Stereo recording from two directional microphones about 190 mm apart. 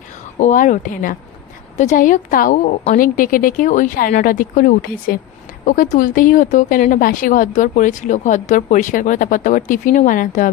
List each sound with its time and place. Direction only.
0.4 s a woman's voice: 40° left (ahead or behind)